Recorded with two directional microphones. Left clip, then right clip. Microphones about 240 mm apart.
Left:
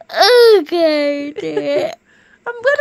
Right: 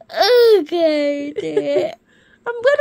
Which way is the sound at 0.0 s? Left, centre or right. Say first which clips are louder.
Left 3 dB; centre.